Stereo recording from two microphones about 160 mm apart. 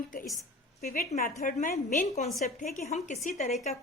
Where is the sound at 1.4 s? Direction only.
60° left (ahead or behind).